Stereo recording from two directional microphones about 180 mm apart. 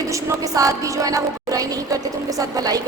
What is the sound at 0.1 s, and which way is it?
Music, 20° right (ahead or behind).